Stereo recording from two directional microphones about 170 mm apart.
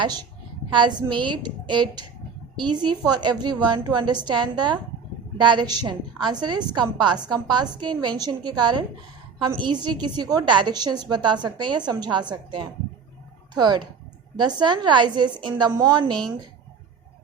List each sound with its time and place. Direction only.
0.0 s a woman's voice: 25° right (ahead or behind)